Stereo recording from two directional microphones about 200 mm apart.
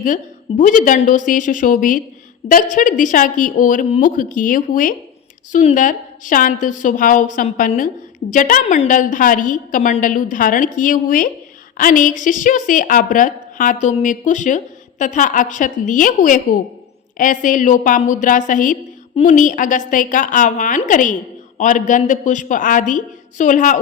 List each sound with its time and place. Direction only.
0.0 s a woman's voice: 40° left (ahead or behind)